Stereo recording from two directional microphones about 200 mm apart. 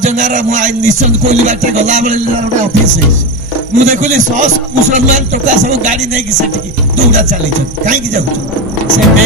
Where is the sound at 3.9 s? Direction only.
35° right (ahead or behind).